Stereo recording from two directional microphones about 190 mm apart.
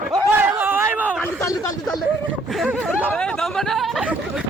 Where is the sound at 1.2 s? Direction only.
15° left (ahead or behind).